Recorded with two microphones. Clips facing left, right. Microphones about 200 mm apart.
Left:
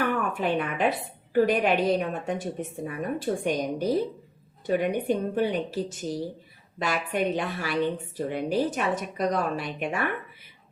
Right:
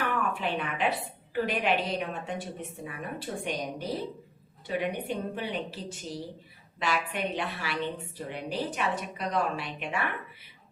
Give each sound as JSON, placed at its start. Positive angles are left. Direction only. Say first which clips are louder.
{"t": 0.3, "sound": "a woman's voice", "louder": "left 5 dB", "side_deg": 45}